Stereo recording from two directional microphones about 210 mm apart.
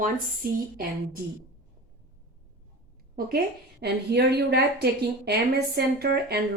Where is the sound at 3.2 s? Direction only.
45° right (ahead or behind).